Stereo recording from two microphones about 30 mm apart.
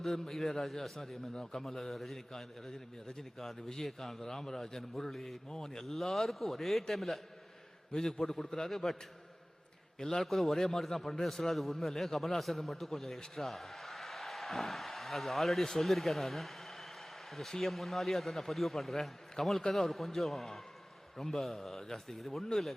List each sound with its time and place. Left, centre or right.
0.0 s a man's voice: centre
1.3 s a man's voice: left
1.6 s a man's voice: centre
7.9 s a man's voice: centre
10.2 s a man's voice: centre